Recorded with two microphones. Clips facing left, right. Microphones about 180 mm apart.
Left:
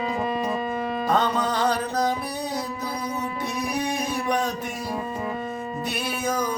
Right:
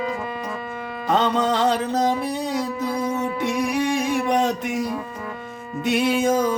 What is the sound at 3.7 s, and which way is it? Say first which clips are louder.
Music: right 5 dB; 90° right.